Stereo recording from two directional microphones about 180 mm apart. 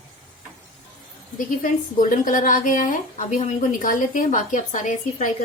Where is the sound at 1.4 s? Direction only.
45° left (ahead or behind).